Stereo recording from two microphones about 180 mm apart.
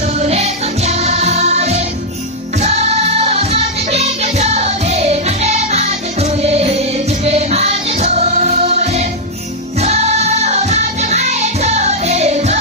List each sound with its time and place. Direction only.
0.0 s music: 35° right (ahead or behind)